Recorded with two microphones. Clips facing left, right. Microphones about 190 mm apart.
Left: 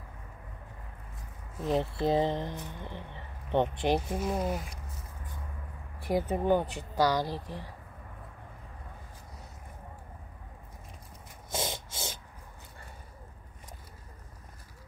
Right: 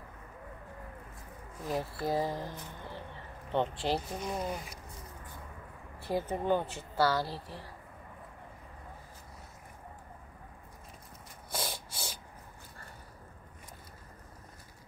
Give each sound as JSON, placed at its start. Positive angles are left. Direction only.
{"t": 1.6, "sound": "speech", "side_deg": 20}
{"t": 4.2, "sound": "speech", "side_deg": 5}
{"t": 5.9, "sound": "a woman's voice", "side_deg": 15}
{"t": 11.5, "sound": "a sound", "side_deg": 20}